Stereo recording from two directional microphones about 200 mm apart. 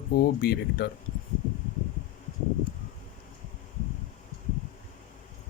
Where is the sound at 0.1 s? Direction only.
50° left (ahead or behind).